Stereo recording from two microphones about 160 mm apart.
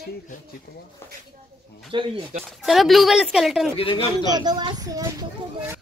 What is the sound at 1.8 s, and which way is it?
Speech, 30° right (ahead or behind).